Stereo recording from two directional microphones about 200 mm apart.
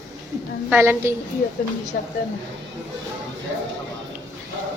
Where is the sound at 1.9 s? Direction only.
55° left (ahead or behind).